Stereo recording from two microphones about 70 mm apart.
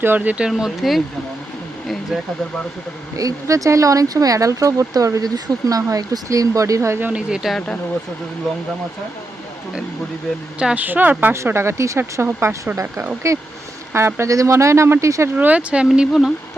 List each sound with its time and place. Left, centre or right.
0.0 s a woman's voice: right
0.6 s speech: centre
3.2 s speech: right
7.1 s speech: centre
10.8 s a woman's voice: right
11.4 s speech: right
13.2 s speech: right
15.4 s speech: right
15.9 s speech: centre